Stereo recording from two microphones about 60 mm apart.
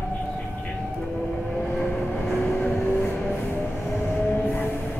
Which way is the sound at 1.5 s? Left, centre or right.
Centre.